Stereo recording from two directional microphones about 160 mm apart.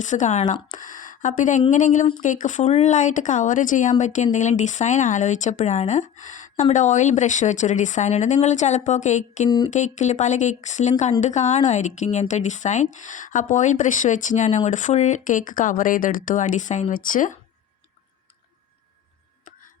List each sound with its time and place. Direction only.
0.0 s speech: 50° left (ahead or behind)